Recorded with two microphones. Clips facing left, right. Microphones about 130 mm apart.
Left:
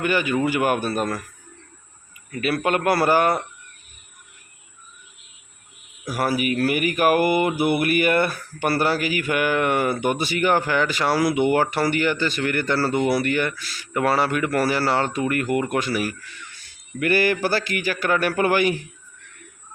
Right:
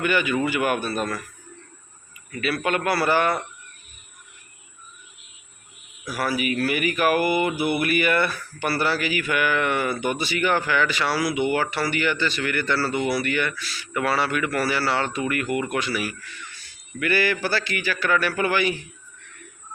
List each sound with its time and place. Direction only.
0.0 s speech: 40° left (ahead or behind)
2.3 s speech: 45° left (ahead or behind)
6.1 s speech: 50° left (ahead or behind)